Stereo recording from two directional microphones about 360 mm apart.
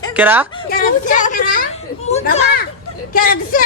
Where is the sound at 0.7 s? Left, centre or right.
Left.